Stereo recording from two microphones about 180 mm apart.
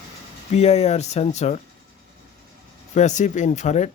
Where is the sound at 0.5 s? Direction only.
35° left (ahead or behind).